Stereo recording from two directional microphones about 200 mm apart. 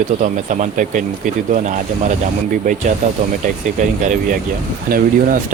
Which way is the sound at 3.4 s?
40° right (ahead or behind).